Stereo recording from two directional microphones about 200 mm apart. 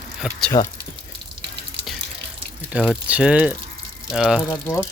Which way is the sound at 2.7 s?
5° right (ahead or behind).